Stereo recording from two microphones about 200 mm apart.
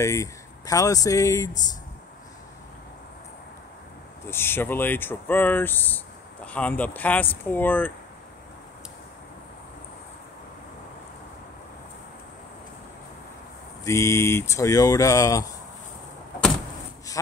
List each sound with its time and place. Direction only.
0.0 s speech: 15° left (ahead or behind)
4.3 s speech: 10° left (ahead or behind)
13.8 s speech: 15° left (ahead or behind)